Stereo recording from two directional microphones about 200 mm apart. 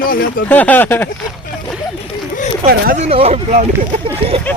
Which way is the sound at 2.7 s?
45° right (ahead or behind).